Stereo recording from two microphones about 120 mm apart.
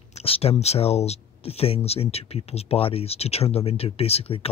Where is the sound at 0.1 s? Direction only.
55° left (ahead or behind).